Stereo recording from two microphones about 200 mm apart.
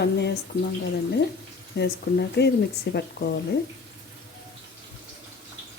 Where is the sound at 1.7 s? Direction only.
55° left (ahead or behind).